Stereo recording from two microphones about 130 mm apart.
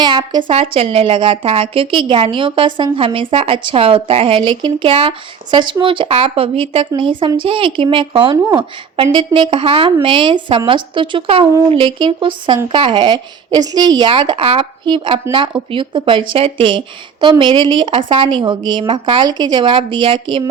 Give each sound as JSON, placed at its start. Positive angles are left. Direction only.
{"t": 0.0, "sound": "speech", "side_deg": -30}
{"t": 0.5, "sound": "a woman's voice", "side_deg": -50}